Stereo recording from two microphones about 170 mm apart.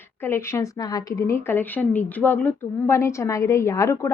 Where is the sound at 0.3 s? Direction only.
15° left (ahead or behind).